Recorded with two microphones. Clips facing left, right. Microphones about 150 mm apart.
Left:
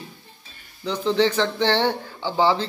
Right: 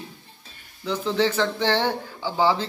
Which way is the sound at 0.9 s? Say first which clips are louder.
Left 2 dB; 5° right (ahead or behind).